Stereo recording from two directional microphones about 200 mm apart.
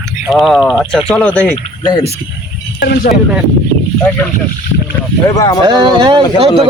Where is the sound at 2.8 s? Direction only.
55° left (ahead or behind).